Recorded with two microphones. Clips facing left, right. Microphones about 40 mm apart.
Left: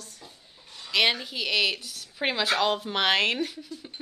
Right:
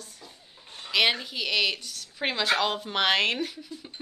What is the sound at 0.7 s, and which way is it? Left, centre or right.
Chicken, right.